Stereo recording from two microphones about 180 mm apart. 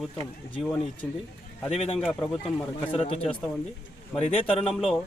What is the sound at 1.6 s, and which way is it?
Speech, 35° left (ahead or behind).